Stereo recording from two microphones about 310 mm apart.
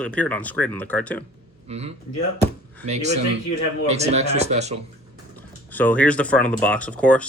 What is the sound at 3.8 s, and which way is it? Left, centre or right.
Speech, right.